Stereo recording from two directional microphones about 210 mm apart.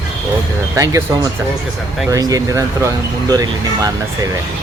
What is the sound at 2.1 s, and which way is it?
Speech, 15° right (ahead or behind).